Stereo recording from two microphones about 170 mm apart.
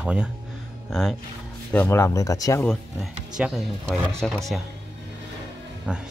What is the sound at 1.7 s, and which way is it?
Speech, 15° left (ahead or behind).